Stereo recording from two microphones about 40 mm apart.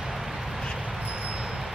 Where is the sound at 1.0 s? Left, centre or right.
Right.